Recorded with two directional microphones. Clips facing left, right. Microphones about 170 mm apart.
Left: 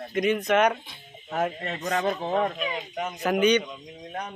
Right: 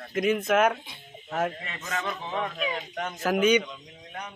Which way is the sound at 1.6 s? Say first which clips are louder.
Left 7 dB; 40° left (ahead or behind).